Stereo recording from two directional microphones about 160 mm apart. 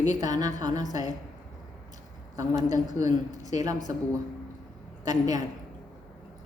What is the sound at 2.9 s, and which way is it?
Speech, 50° left (ahead or behind).